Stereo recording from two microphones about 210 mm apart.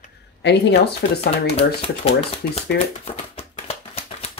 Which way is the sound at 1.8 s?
25° left (ahead or behind).